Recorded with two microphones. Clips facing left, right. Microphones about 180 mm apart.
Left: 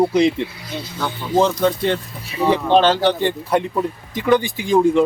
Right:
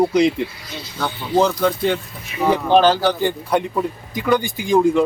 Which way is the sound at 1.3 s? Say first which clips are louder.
Left 1 dB; centre (ahead or behind).